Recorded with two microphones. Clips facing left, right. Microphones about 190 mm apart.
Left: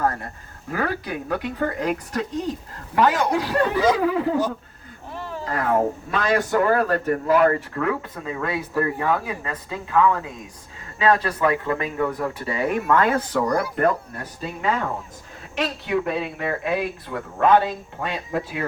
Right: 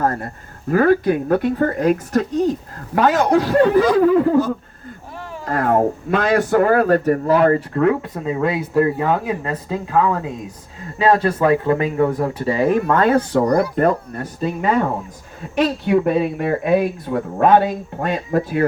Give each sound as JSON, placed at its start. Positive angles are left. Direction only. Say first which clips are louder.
{"t": 0.0, "sound": "speech", "louder": "right 4 dB", "side_deg": -45}
{"t": 5.5, "sound": "a man's voice", "louder": "right 5 dB", "side_deg": -45}
{"t": 14.4, "sound": "speech", "louder": "right 6 dB", "side_deg": -50}